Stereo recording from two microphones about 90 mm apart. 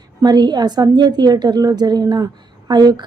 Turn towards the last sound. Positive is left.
turn(degrees=-50)  # may be behind; listen again after turning